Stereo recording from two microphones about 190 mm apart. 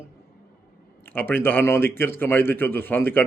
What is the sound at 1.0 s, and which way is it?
A man's voice, 10° left (ahead or behind).